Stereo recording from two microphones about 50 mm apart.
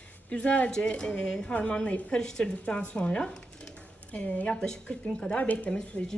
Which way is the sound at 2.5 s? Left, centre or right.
Left.